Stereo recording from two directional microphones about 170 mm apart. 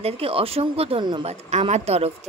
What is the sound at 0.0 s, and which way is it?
Speech, 35° right (ahead or behind).